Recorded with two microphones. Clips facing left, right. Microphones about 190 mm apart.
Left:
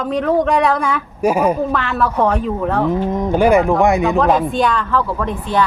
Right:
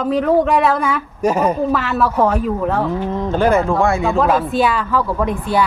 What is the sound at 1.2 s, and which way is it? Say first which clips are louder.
Speech: left 1 dB; 10° left (ahead or behind).